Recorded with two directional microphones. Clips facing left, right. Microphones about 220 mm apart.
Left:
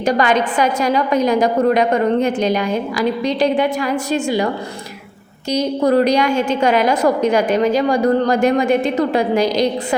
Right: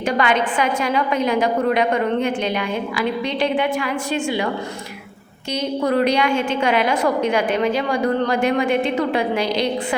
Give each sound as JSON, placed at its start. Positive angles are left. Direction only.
{"t": 0.0, "sound": "a woman's voice", "side_deg": 40}
{"t": 5.5, "sound": "a woman's voice", "side_deg": 40}